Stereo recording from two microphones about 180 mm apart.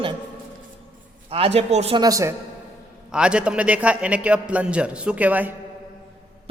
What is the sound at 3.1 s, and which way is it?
A man's voice, 5° right (ahead or behind).